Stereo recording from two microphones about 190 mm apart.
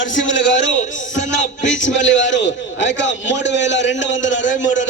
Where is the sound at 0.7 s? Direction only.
40° left (ahead or behind).